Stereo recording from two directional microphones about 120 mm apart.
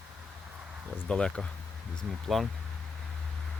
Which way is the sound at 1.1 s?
5° left (ahead or behind).